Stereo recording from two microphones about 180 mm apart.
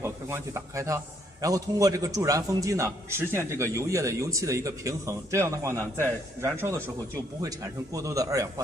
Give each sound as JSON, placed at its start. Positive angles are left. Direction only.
{"t": 0.0, "sound": "a man's voice", "side_deg": -15}